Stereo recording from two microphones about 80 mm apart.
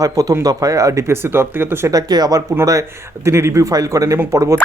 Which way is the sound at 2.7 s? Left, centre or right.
Right.